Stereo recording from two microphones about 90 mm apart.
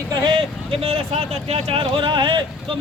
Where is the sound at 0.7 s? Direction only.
90° right; by 2.4 s 60° right (ahead or behind).